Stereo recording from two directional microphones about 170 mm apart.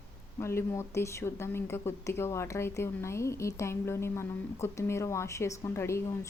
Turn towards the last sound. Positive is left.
turn(degrees=15)  # may be behind; listen again after turning